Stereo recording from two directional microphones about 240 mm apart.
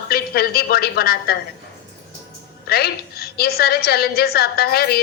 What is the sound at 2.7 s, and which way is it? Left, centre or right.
A woman's voice, left.